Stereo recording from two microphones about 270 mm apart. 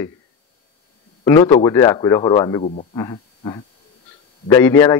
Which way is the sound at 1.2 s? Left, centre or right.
Centre.